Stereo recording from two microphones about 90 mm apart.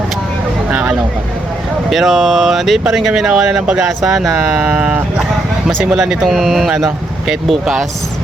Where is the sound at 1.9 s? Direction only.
Centre (ahead or behind).